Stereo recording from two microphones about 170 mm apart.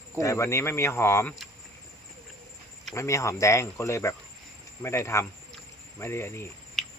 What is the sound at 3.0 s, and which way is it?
Speech, 15° left (ahead or behind).